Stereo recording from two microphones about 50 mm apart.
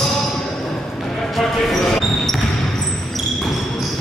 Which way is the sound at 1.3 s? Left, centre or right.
Centre.